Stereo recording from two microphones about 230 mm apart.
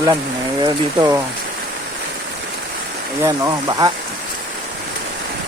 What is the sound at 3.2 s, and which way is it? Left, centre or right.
Speech, centre.